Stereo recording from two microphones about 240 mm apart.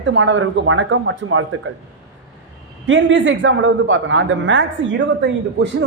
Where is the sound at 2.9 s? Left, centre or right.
Right.